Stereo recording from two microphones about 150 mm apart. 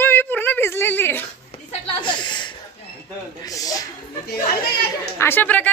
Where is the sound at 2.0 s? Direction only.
30° left (ahead or behind).